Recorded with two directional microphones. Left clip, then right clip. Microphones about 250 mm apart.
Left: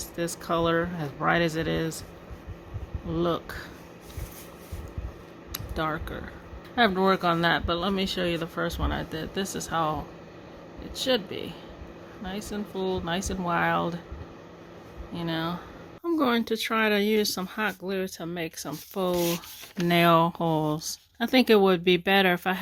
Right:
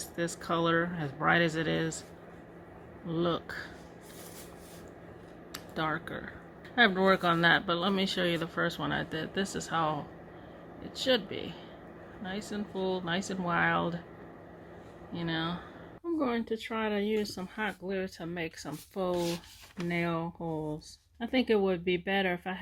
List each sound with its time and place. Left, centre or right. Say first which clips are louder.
0.2 s speech: left 4 dB; centre
3.1 s speech: left 4 dB; centre
5.5 s speech: left 3 dB; centre
15.1 s speech: left 4 dB; centre
16.1 s speech: left 7 dB; left